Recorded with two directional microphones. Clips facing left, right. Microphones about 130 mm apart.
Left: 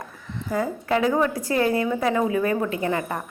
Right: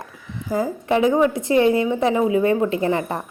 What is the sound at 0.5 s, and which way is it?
A woman's voice, 25° right (ahead or behind).